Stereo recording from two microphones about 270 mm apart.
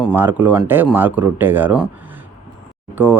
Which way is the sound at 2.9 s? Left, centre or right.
Centre.